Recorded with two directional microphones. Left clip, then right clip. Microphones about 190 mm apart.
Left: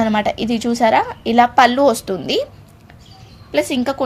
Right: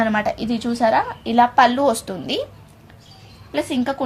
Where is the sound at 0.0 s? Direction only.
30° left (ahead or behind).